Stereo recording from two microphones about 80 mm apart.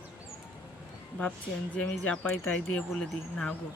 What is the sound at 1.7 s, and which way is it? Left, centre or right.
Speech, centre.